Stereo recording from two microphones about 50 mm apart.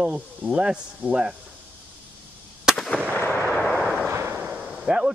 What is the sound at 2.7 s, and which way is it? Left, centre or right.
Artillery fire, centre.